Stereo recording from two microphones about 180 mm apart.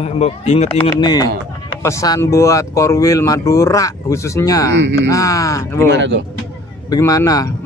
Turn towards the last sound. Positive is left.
turn(degrees=20)  # may be behind; listen again after turning